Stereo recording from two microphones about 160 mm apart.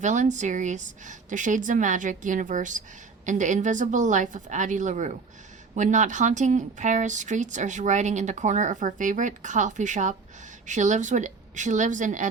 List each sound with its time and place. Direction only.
0.0 s speech: 50° right (ahead or behind)